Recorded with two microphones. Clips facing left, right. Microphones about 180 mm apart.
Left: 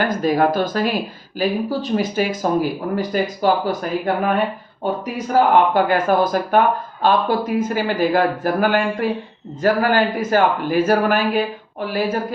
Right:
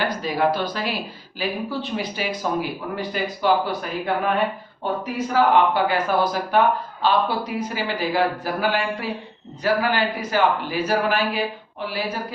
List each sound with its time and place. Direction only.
0.0 s speech: 50° left (ahead or behind)
5.3 s speech: 50° left (ahead or behind)